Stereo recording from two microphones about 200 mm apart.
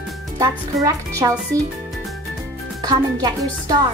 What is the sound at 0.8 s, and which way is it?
Speech, 15° right (ahead or behind).